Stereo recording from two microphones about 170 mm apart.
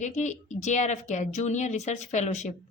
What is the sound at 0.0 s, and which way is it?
A woman's voice, 45° left (ahead or behind).